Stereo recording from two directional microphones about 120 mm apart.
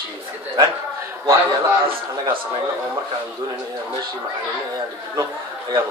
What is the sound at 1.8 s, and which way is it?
Speech, 45° right (ahead or behind).